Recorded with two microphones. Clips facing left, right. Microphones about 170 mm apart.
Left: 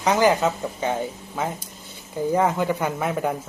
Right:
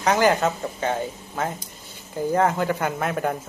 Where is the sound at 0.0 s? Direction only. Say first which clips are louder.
Left 1 dB; 15° left (ahead or behind).